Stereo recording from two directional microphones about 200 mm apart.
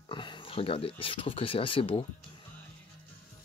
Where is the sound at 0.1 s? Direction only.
25° left (ahead or behind).